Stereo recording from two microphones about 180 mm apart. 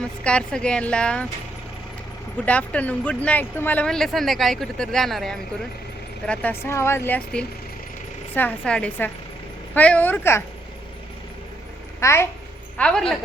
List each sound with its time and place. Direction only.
0.0 s speech: 5° left (ahead or behind)
2.4 s speech: 10° left (ahead or behind)
11.9 s a child's voice: 15° left (ahead or behind)